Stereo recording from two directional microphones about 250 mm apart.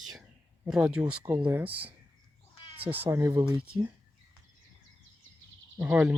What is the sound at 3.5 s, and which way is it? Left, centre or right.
Speech, right.